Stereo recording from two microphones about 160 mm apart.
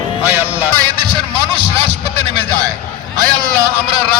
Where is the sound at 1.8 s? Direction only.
40° right (ahead or behind).